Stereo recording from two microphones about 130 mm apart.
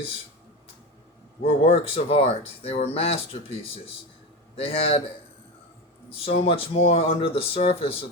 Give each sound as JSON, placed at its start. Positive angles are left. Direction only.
{"t": 1.5, "sound": "speech", "side_deg": 50}
{"t": 4.5, "sound": "speech", "side_deg": 45}
{"t": 6.1, "sound": "speech", "side_deg": 50}